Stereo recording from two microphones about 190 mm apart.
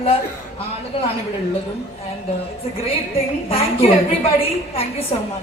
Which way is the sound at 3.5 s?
30° left (ahead or behind).